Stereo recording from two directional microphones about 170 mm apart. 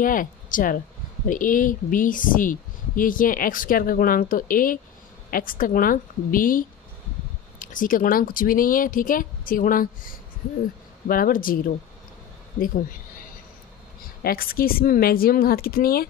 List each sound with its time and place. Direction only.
0.0 s speech: 55° left (ahead or behind)
14.2 s speech: 60° left (ahead or behind)